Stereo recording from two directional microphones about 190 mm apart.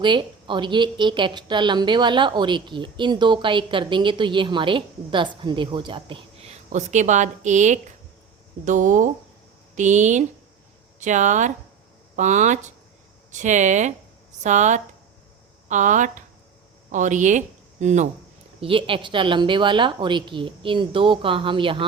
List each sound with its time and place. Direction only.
0.0 s a woman's voice: 25° right (ahead or behind)
6.7 s a woman's voice: 40° right (ahead or behind)